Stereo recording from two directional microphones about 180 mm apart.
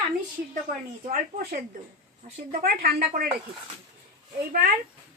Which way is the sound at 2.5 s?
55° right (ahead or behind).